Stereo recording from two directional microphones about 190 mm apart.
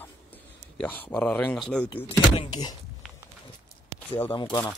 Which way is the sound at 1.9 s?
25° left (ahead or behind).